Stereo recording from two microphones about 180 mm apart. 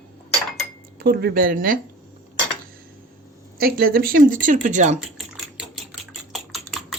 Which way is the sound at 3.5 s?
55° right (ahead or behind).